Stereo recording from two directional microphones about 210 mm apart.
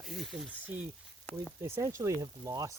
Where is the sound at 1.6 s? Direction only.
15° right (ahead or behind).